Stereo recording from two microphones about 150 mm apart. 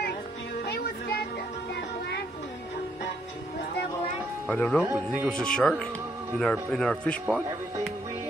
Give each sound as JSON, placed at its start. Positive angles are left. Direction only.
{"t": 0.7, "sound": "music", "side_deg": 90}
{"t": 4.5, "sound": "speech", "side_deg": 10}
{"t": 4.9, "sound": "speech", "side_deg": -10}
{"t": 5.3, "sound": "speech", "side_deg": 5}